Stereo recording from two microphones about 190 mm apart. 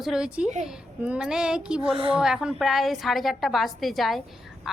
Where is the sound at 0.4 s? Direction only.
35° right (ahead or behind).